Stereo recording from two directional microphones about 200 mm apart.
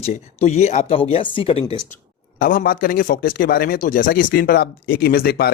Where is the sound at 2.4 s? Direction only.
45° left (ahead or behind).